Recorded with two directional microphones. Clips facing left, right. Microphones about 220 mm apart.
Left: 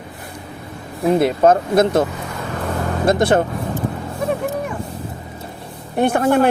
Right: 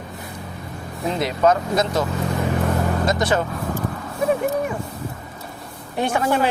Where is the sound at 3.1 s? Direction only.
55° left (ahead or behind).